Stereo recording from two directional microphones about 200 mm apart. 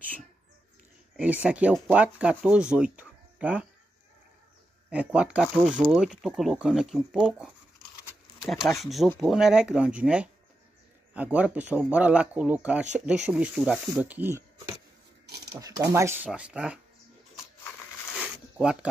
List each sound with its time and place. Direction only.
1.1 s speech: 5° right (ahead or behind)
4.8 s speech: 5° right (ahead or behind)
15.2 s a sound: 55° right (ahead or behind)
15.6 s speech: 15° right (ahead or behind)
18.6 s speech: 5° right (ahead or behind)